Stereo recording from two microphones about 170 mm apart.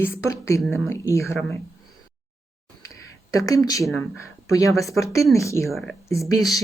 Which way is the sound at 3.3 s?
20° left (ahead or behind).